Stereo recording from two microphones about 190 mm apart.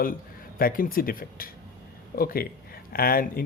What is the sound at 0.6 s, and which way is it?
Speech, 50° left (ahead or behind).